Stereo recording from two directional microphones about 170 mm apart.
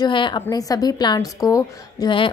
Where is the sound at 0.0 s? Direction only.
25° left (ahead or behind).